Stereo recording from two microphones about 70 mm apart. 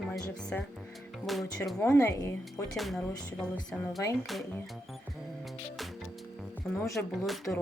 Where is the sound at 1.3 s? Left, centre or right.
Centre.